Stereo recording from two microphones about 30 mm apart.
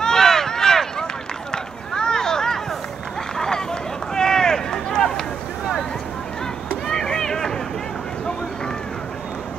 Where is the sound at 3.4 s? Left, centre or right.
Left.